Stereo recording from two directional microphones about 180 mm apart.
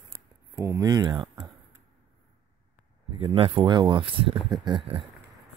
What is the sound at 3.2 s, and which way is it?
Speech, 30° right (ahead or behind).